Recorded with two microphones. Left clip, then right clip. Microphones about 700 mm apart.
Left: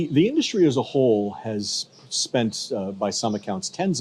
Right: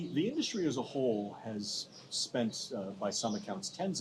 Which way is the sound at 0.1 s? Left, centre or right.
Left.